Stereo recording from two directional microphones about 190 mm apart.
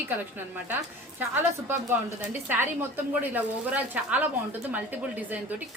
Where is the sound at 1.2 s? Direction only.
10° right (ahead or behind).